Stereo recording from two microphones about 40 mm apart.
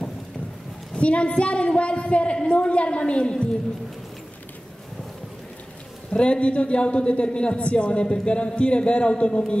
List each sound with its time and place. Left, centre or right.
0.9 s a woman's voice: left
6.1 s speech: left